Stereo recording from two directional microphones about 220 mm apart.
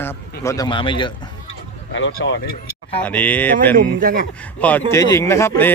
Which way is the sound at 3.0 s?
5° left (ahead or behind).